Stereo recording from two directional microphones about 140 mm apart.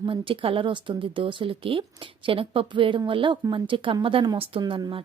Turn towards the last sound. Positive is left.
turn(degrees=-35)  # may be behind; listen again after turning